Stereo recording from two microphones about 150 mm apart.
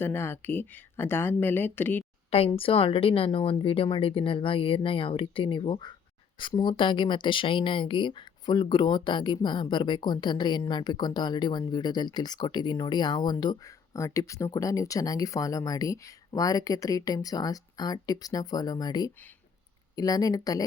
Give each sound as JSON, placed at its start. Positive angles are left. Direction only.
{"t": 0.0, "sound": "speech", "side_deg": 15}
{"t": 2.6, "sound": "speech", "side_deg": 40}